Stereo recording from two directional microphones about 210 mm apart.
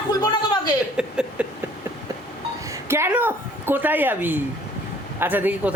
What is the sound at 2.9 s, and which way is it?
A woman's voice, 10° right (ahead or behind).